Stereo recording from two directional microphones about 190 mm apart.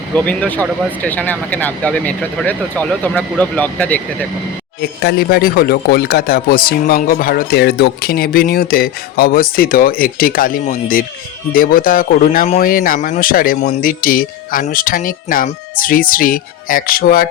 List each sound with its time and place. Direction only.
0.1 s speech: 5° left (ahead or behind)
4.8 s speech: 55° left (ahead or behind)